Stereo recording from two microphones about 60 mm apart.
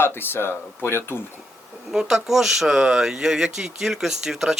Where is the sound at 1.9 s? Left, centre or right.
Centre.